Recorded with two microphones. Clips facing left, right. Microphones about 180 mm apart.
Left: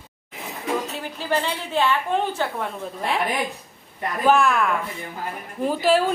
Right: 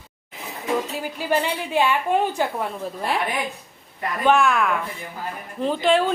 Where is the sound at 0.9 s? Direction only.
10° right (ahead or behind).